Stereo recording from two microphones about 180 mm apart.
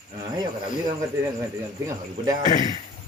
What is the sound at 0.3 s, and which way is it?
Speech, 20° right (ahead or behind).